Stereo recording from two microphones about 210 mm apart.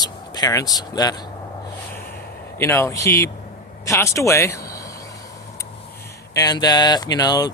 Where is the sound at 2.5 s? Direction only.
10° left (ahead or behind).